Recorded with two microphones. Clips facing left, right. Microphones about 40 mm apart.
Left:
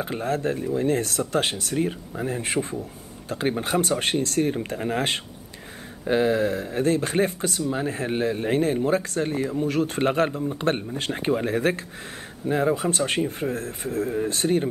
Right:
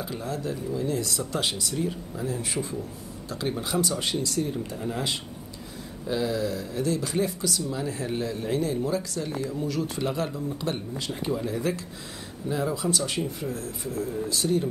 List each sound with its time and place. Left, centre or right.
0.0 s speech: left